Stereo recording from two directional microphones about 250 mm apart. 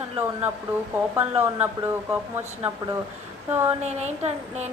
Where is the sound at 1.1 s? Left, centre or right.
Centre.